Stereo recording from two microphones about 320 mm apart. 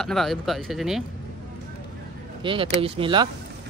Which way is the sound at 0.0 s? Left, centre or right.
Centre.